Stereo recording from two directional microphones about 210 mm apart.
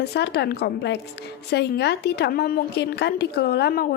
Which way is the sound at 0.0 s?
50° left (ahead or behind).